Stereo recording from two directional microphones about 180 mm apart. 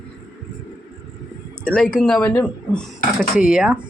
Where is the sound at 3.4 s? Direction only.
5° right (ahead or behind).